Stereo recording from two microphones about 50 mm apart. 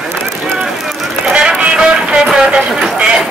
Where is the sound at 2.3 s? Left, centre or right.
Centre.